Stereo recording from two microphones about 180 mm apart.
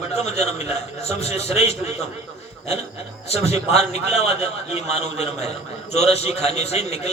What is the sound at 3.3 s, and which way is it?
A man's voice, 35° left (ahead or behind).